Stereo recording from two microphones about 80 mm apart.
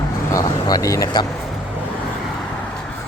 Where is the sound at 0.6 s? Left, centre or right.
Left.